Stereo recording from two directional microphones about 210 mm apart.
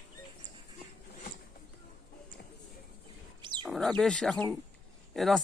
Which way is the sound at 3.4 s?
20° right (ahead or behind).